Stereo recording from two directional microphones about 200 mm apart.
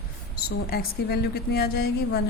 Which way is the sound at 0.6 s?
50° left (ahead or behind).